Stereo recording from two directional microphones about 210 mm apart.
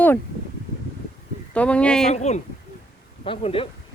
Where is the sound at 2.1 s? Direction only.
35° left (ahead or behind).